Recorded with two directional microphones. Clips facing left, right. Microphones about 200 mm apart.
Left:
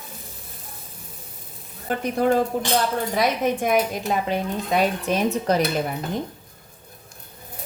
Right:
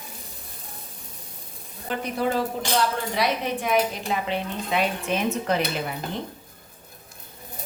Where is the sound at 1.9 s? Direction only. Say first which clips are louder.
Left 5 dB; 45° left (ahead or behind).